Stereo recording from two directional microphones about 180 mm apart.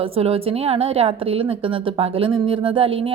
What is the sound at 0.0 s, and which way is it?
A woman's voice, 30° right (ahead or behind).